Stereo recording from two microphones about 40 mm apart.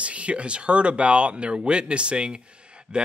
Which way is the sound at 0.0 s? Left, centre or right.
Right.